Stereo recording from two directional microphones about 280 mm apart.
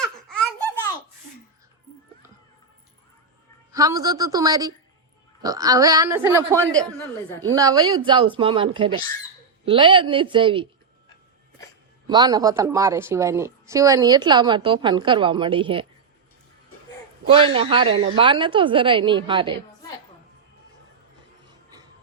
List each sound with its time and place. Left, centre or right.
0.0 s baby laughter: centre
3.7 s a woman's voice: centre
12.0 s a woman's voice: centre
17.2 s a man's voice: centre
21.4 s music: centre